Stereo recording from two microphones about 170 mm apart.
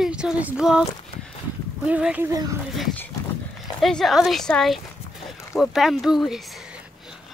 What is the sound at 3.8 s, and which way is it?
A woman's voice, centre (ahead or behind).